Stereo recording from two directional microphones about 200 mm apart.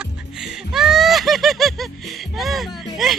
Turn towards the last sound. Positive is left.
turn(degrees=0)  # may be behind; listen again after turning